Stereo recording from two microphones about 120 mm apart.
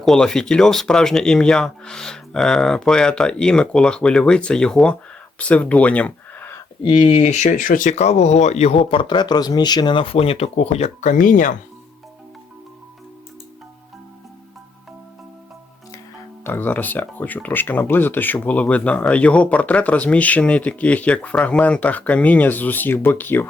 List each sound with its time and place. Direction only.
0.0 s speech: 5° left (ahead or behind)
6.8 s speech: 45° left (ahead or behind); by 11.5 s 90° left
16.4 s speech: 15° left (ahead or behind)